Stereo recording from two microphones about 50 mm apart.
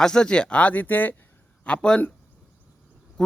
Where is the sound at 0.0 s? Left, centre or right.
Centre; by 1.1 s left.